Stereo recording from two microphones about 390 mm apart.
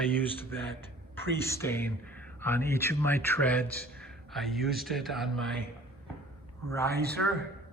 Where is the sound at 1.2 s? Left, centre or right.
Centre.